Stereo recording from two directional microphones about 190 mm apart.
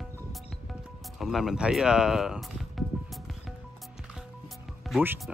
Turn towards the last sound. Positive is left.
turn(degrees=-10)  # may be behind; listen again after turning